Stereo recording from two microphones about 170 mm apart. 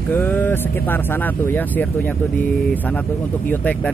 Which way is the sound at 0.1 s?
10° left (ahead or behind).